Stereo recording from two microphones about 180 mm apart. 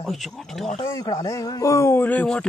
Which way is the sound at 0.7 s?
20° left (ahead or behind).